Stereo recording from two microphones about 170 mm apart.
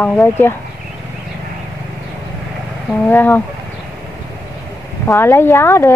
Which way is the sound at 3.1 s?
10° left (ahead or behind).